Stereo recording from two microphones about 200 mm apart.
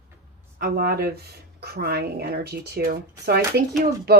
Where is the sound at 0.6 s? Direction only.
50° right (ahead or behind).